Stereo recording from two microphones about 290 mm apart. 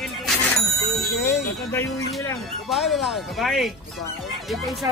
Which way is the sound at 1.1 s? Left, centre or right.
Left.